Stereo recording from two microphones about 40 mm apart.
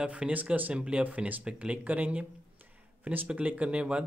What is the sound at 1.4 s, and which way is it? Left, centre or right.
Speech, right.